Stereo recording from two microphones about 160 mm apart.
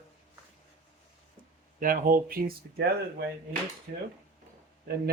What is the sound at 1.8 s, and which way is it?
Speech, 60° right (ahead or behind).